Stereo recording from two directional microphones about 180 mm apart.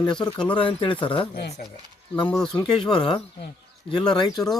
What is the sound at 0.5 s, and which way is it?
Speech, 30° left (ahead or behind).